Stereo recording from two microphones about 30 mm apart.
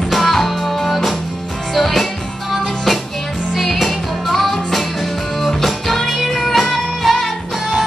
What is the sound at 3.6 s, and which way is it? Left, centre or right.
Music, centre.